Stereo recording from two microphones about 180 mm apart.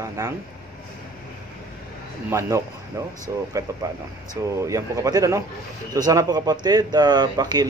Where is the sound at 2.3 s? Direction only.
15° right (ahead or behind).